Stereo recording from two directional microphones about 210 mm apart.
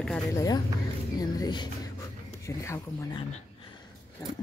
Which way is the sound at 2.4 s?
15° left (ahead or behind).